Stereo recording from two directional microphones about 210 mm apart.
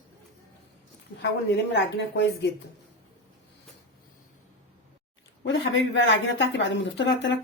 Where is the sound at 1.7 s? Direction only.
55° left (ahead or behind).